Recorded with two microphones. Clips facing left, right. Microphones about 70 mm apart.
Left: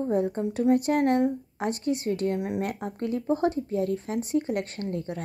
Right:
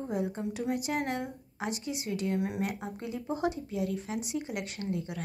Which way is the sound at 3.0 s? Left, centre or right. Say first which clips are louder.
Left 8 dB; left.